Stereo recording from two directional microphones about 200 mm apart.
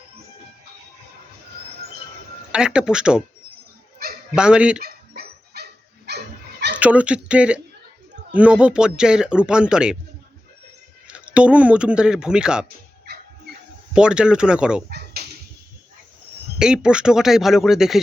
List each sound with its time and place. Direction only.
2.5 s speech: 5° right (ahead or behind)
4.0 s honk: 50° right (ahead or behind)
4.4 s speech: 5° right (ahead or behind)
4.8 s dog: 50° right (ahead or behind)
6.7 s speech: 5° right (ahead or behind)
11.1 s speech: 5° right (ahead or behind)
13.1 s music: 55° right (ahead or behind)
13.9 s speech: 5° right (ahead or behind)
14.8 s dog: 50° right (ahead or behind)
16.6 s speech: 5° right (ahead or behind)